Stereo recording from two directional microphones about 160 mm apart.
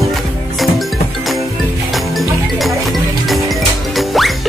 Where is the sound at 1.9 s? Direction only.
Centre (ahead or behind).